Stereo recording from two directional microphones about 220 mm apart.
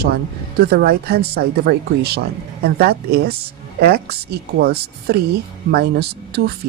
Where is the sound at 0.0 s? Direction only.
45° right (ahead or behind).